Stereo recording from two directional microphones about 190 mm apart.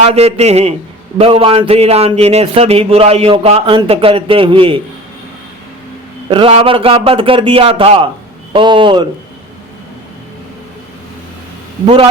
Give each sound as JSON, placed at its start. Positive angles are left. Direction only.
{"t": 0.0, "sound": "a man's voice", "side_deg": -30}
{"t": 6.3, "sound": "a man's voice", "side_deg": -30}